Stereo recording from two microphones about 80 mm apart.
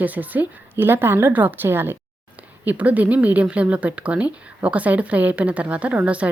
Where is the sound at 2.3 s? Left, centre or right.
Centre.